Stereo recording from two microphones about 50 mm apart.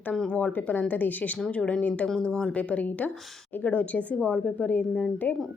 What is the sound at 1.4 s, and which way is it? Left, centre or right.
A woman's voice, left.